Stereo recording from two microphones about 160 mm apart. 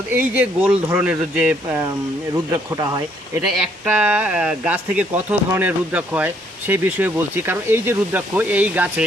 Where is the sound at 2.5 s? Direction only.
20° right (ahead or behind).